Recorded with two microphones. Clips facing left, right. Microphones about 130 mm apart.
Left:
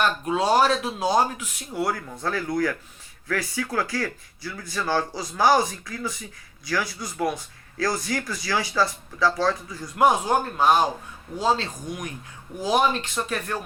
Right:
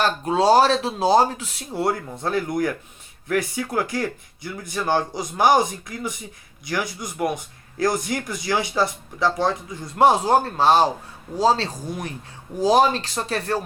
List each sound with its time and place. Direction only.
0.0 s speech: 30° right (ahead or behind)